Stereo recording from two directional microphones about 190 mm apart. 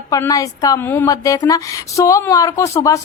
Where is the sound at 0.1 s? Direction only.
20° left (ahead or behind).